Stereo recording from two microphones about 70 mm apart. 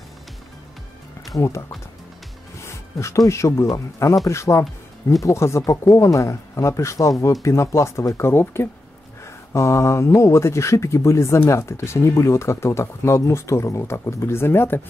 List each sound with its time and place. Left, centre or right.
1.3 s speech: left
2.6 s speech: left